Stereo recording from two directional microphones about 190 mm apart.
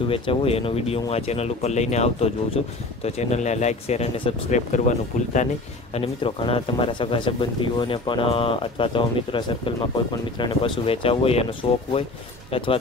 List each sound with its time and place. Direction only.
0.1 s speech: 30° left (ahead or behind)
5.9 s speech: 30° left (ahead or behind)